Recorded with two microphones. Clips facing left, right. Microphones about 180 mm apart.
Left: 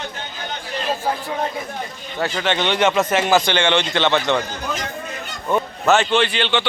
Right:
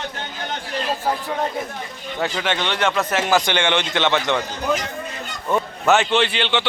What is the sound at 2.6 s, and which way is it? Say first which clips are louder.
Speech: left 6 dB; 5° left (ahead or behind).